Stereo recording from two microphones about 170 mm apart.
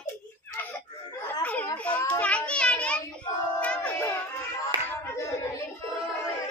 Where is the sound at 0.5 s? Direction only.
15° left (ahead or behind).